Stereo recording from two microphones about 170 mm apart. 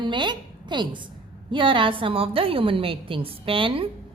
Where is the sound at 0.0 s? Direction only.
25° right (ahead or behind).